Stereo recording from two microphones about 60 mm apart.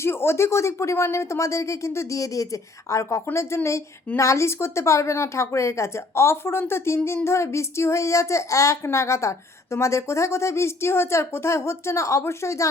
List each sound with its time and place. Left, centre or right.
0.0 s a woman's voice: left